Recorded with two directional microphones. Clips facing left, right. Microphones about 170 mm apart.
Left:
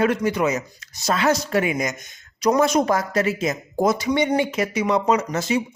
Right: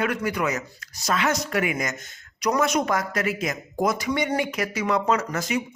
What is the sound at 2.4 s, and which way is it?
Speech, 30° left (ahead or behind).